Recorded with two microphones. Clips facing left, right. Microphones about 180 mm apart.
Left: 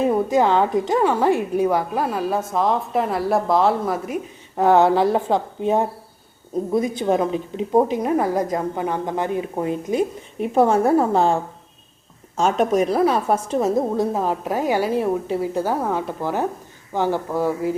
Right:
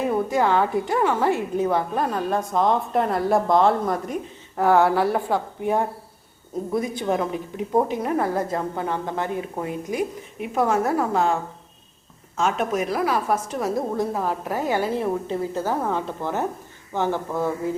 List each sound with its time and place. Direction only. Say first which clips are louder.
0.0 s a woman's voice: left 4 dB; 20° left (ahead or behind)
4.6 s a woman's voice: left 3 dB; 20° left (ahead or behind)
12.4 s a woman's voice: left 5 dB; 35° left (ahead or behind); by 17.7 s 10° left (ahead or behind)